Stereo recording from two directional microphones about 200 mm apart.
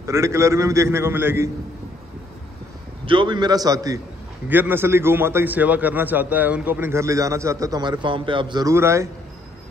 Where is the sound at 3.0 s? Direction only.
25° right (ahead or behind).